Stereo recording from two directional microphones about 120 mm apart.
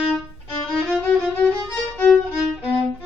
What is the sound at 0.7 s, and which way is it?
Violin, 5° left (ahead or behind).